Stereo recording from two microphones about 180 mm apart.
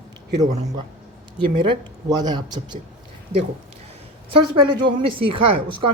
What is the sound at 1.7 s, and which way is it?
Speech, 25° right (ahead or behind).